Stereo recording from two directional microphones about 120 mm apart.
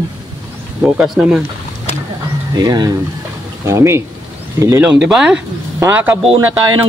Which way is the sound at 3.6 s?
20° right (ahead or behind).